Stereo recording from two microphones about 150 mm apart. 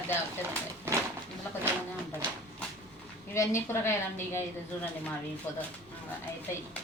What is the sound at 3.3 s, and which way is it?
A woman's voice, 20° left (ahead or behind).